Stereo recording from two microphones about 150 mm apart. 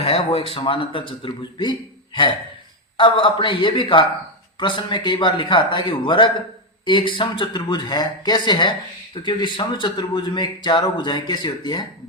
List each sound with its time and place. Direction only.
0.0 s speech: 40° left (ahead or behind)
3.0 s speech: 35° left (ahead or behind)